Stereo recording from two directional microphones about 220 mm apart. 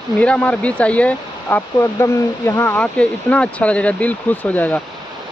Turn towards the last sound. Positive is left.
turn(degrees=5)  # may be behind; listen again after turning